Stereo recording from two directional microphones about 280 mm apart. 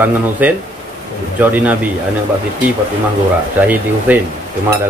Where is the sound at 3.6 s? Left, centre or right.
Centre.